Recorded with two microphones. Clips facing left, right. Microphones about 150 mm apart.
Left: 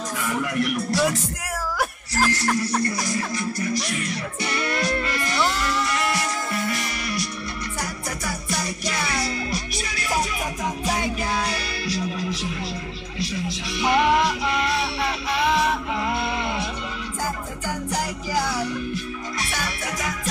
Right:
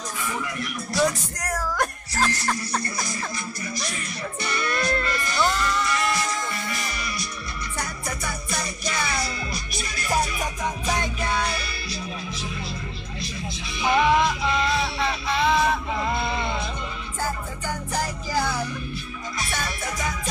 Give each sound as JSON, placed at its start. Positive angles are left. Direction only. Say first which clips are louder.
{"t": 0.2, "sound": "speech", "louder": "left 6 dB", "side_deg": 55}
{"t": 0.9, "sound": "speech", "louder": "right 3 dB", "side_deg": 5}
{"t": 3.3, "sound": "music", "louder": "left 7 dB", "side_deg": 85}
{"t": 9.2, "sound": "music", "louder": "left 3 dB", "side_deg": 90}
{"t": 10.9, "sound": "music", "louder": "left 2 dB", "side_deg": 5}
{"t": 11.4, "sound": "music", "louder": "left 3 dB", "side_deg": 80}
{"t": 14.8, "sound": "music", "louder": "even", "side_deg": 5}
{"t": 17.6, "sound": "music", "louder": "left 1 dB", "side_deg": 10}